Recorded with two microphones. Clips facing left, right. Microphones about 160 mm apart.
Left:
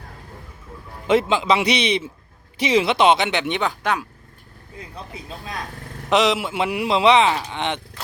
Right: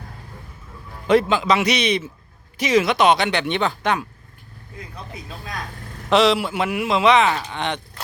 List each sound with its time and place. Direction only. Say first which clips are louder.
1.0 s speech: right 1 dB; 20° left (ahead or behind)
6.1 s speech: right 2 dB; 20° left (ahead or behind)
7.3 s speech: left 1 dB; 15° left (ahead or behind)